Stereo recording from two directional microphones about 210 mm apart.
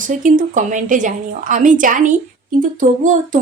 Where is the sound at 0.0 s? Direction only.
40° right (ahead or behind).